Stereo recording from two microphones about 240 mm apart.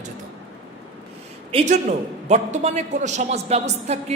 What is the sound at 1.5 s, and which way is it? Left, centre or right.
A man's voice, right.